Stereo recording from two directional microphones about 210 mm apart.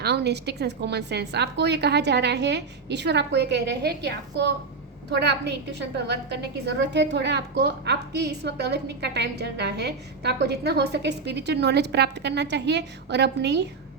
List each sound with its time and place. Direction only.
0.0 s a woman's voice: 55° right (ahead or behind)